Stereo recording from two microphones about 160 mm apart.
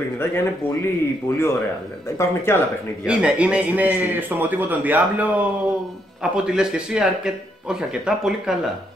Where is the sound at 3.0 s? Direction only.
5° right (ahead or behind).